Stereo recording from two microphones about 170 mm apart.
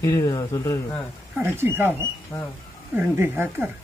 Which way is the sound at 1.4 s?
15° right (ahead or behind).